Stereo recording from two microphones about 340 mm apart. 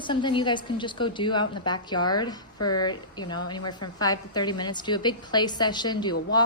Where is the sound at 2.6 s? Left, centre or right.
Left.